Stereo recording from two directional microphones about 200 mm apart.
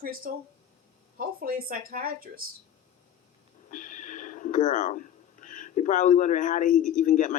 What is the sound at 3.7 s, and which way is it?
Speech, 40° left (ahead or behind).